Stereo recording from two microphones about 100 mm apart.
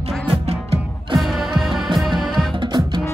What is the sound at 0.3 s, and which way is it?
Music, 80° right.